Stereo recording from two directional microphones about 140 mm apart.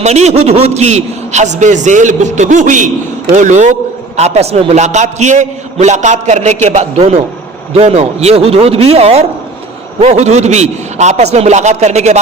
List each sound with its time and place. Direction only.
0.0 s a man's voice: 50° right (ahead or behind)